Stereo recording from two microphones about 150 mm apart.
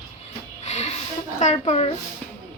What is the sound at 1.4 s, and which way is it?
Speech, 45° left (ahead or behind).